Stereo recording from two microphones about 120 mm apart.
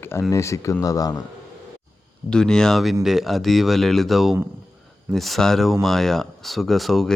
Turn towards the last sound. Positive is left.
turn(degrees=0)  # may be behind; listen again after turning